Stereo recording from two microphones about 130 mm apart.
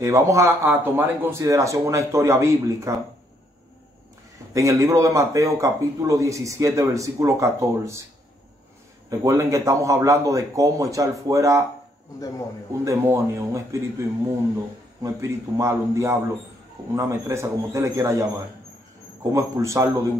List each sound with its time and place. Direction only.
0.0 s speech: 25° right (ahead or behind)
4.6 s speech: 25° right (ahead or behind)
9.2 s speech: 25° right (ahead or behind)
12.8 s speech: 20° right (ahead or behind)
19.3 s speech: 25° right (ahead or behind)